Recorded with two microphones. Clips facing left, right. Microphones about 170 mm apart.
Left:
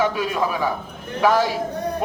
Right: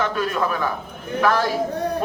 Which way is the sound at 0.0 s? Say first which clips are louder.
Left 1 dB; 10° left (ahead or behind).